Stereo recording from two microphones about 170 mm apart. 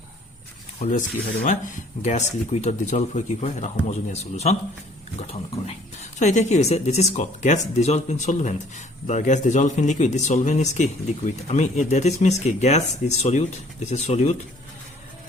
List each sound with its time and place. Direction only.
0.8 s a man's voice: 50° left (ahead or behind)